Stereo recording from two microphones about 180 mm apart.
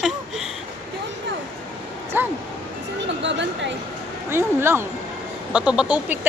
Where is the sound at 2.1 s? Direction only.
10° right (ahead or behind).